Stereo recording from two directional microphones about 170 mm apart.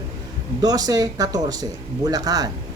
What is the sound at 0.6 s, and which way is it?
Speech, 20° right (ahead or behind).